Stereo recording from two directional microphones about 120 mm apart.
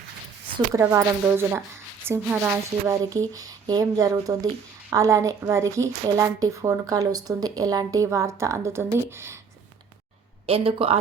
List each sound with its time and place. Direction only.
0.7 s a woman's voice: 25° right (ahead or behind)
2.8 s a woman's voice: 30° right (ahead or behind)
10.4 s speech: 50° right (ahead or behind)